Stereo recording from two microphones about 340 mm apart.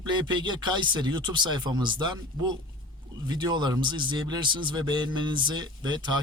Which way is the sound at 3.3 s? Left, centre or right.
Centre.